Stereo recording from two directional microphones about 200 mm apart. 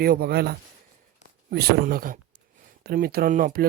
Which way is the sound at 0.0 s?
50° right (ahead or behind).